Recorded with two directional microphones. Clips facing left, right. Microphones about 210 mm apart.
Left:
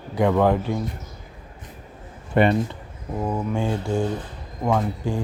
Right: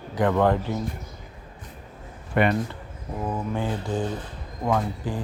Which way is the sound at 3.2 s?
10° left (ahead or behind).